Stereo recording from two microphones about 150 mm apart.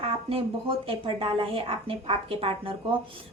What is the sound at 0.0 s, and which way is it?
Speech, 40° right (ahead or behind).